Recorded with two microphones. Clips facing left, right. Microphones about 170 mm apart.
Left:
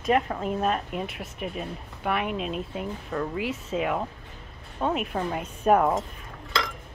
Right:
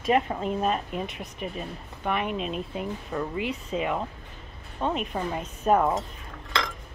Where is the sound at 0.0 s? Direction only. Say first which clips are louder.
Even; centre (ahead or behind).